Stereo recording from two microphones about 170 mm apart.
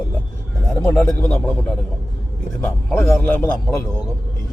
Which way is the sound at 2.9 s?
10° left (ahead or behind).